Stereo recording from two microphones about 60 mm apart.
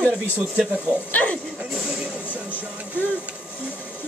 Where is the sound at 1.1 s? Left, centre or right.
Left.